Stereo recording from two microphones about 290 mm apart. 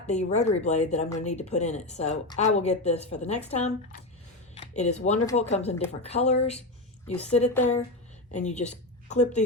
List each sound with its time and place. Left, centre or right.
0.1 s a woman's voice: left